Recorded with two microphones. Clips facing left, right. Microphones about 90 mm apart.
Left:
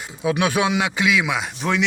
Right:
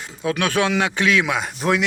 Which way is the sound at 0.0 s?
15° left (ahead or behind).